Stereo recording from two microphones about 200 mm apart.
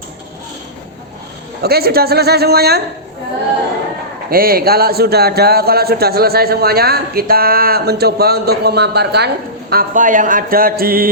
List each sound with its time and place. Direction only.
1.6 s speech: 50° right (ahead or behind)
4.3 s speech: 50° right (ahead or behind)